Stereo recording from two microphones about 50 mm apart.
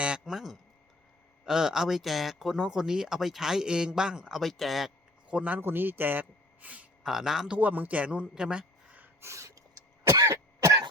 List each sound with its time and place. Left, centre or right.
0.3 s speech: centre
4.4 s speech: centre
5.3 s speech: right
5.5 s a man's voice: right
7.0 s speech: centre
7.5 s speech: right; by 9.0 s centre
9.2 s gasp: right
10.1 s cough: right